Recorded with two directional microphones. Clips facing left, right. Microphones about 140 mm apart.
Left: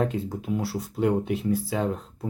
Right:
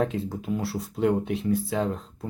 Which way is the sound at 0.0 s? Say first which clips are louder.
Even; centre (ahead or behind).